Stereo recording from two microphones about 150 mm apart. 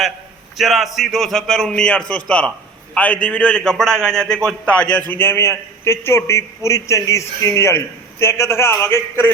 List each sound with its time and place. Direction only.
0.5 s a man's voice: centre (ahead or behind); by 9.3 s 15° left (ahead or behind)